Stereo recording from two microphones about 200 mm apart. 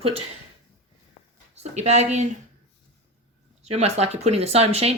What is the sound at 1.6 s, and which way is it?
Speech, 35° right (ahead or behind).